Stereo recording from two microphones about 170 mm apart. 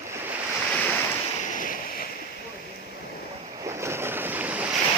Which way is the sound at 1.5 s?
55° left (ahead or behind).